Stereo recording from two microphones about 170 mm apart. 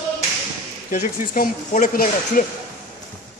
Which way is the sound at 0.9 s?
55° left (ahead or behind).